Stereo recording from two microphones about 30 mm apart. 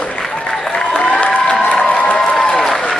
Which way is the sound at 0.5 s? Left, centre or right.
Centre.